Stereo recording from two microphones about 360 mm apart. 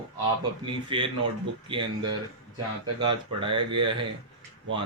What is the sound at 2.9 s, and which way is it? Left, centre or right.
Speech, centre.